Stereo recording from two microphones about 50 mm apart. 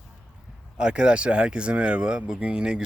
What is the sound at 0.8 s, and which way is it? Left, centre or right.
Speech, centre.